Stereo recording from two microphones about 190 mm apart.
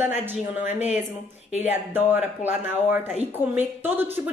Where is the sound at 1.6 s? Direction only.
10° right (ahead or behind).